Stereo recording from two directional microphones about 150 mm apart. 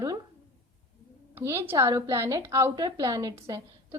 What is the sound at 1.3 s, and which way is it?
A woman's voice, 15° right (ahead or behind).